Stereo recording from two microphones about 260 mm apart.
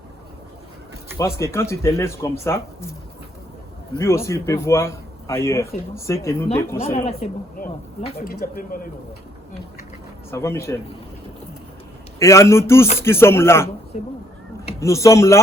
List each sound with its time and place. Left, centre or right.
1.2 s speech: centre
3.9 s speech: centre
6.8 s speech: left
10.3 s speech: centre
12.2 s speech: centre
13.9 s speech: left
14.8 s speech: centre